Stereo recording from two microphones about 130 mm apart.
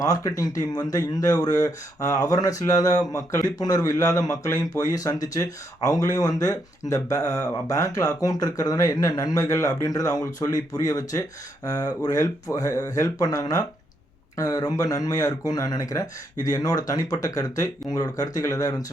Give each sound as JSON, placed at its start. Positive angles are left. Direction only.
{"t": 0.0, "sound": "speech", "side_deg": 25}